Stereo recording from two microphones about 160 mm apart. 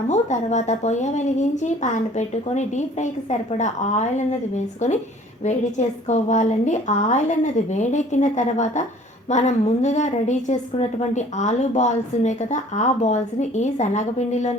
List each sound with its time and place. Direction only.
0.1 s a woman's voice: 45° left (ahead or behind)